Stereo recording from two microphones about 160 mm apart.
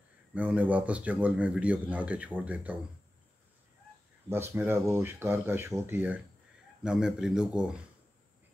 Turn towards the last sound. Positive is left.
turn(degrees=-5)  # may be behind; listen again after turning